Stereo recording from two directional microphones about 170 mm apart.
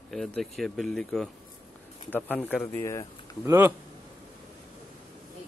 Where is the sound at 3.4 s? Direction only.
15° right (ahead or behind).